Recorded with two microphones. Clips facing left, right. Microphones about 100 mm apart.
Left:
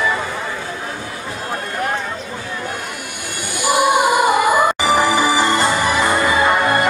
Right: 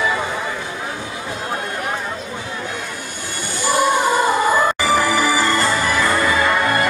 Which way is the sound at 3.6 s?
15° left (ahead or behind).